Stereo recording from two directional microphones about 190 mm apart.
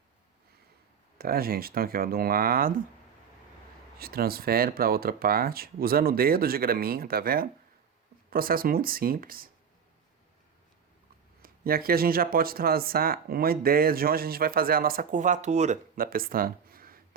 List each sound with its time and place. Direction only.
1.2 s speech: 50° right (ahead or behind)
3.9 s speech: 55° right (ahead or behind)
11.4 s speech: 50° right (ahead or behind)